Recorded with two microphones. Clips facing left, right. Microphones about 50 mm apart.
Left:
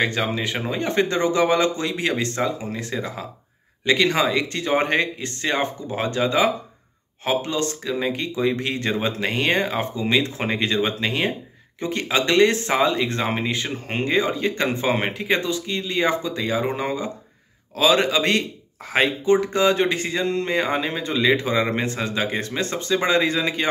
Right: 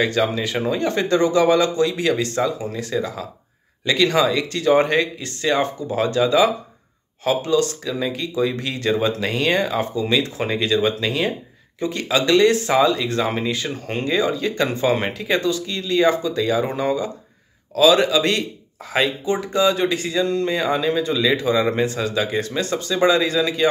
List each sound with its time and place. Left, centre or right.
0.0 s speech: left